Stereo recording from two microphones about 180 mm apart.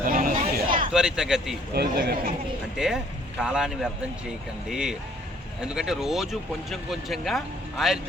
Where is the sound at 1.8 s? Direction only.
55° right (ahead or behind).